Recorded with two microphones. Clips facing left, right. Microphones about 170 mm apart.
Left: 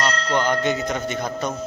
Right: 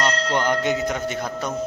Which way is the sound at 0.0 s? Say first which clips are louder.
Even; 15° right (ahead or behind).